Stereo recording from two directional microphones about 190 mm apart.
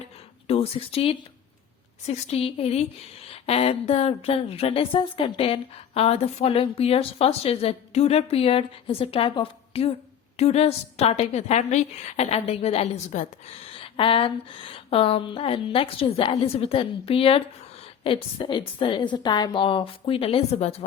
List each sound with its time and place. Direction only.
0.4 s a woman's voice: 30° left (ahead or behind)